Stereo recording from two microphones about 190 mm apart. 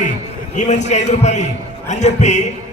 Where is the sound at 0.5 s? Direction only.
40° left (ahead or behind).